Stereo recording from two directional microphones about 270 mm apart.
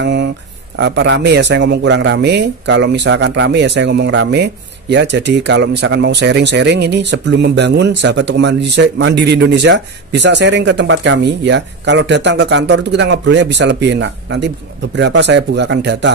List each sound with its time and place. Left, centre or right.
0.0 s speech: right